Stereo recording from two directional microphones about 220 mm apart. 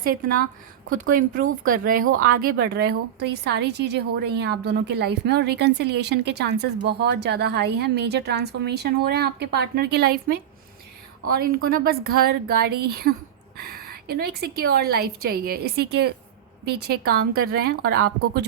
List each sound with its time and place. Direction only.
0.9 s a woman's voice: 40° right (ahead or behind)